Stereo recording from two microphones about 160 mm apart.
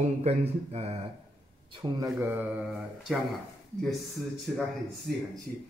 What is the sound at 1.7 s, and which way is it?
Speech, 25° right (ahead or behind).